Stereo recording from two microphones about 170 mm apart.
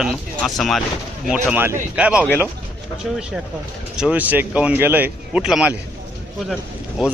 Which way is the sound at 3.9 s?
5° right (ahead or behind).